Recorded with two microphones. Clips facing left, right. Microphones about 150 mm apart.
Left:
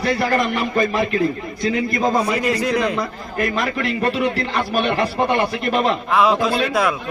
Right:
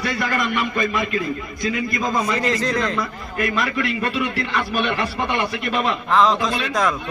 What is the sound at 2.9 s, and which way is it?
A man's voice, 35° left (ahead or behind).